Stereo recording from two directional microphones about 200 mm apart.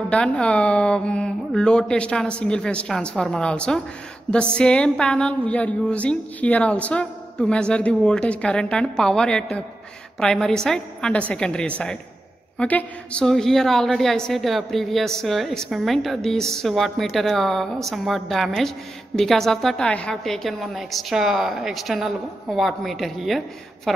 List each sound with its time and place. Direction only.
0.1 s a woman's voice: 5° left (ahead or behind)